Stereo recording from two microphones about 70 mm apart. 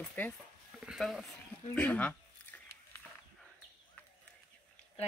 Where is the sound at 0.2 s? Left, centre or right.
Left.